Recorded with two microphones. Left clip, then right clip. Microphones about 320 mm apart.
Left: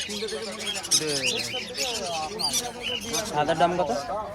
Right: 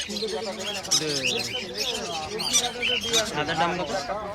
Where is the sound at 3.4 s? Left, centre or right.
Centre.